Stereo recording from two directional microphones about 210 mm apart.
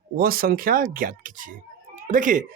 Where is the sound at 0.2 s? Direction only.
45° right (ahead or behind).